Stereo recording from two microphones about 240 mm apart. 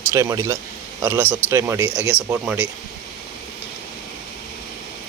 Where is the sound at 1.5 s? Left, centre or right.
Centre.